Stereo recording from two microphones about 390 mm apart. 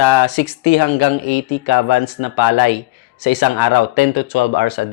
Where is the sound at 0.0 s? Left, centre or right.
Left.